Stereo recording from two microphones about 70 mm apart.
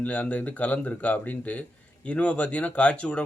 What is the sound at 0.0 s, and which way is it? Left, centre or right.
Speech, centre.